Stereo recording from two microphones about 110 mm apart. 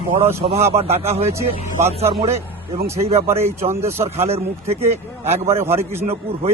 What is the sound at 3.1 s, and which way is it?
Speech, 70° right (ahead or behind).